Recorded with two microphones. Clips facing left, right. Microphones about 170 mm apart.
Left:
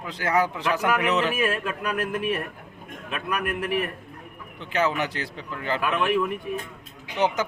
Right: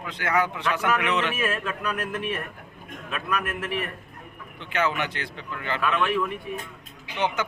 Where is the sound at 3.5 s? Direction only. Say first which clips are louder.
Left 4 dB; 10° left (ahead or behind).